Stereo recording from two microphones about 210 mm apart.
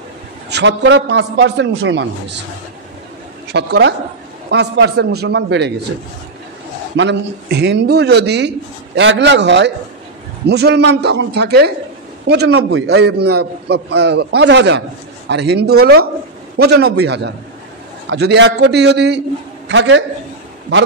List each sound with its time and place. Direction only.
0.5 s speech: 55° right (ahead or behind)
3.5 s a man's voice: 55° right (ahead or behind)
7.0 s a man's voice: 55° right (ahead or behind)